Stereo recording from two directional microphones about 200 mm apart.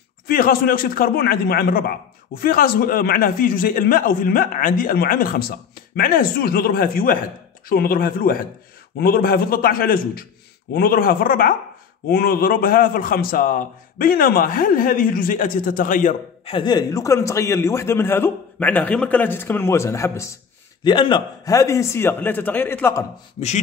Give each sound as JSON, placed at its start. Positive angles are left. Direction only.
{"t": 0.3, "sound": "a man's voice", "side_deg": 45}
{"t": 16.4, "sound": "a man's voice", "side_deg": 25}